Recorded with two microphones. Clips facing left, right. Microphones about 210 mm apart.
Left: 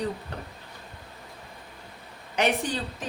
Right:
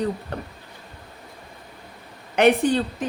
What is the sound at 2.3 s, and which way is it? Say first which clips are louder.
Speech: right 9 dB; 60° right (ahead or behind).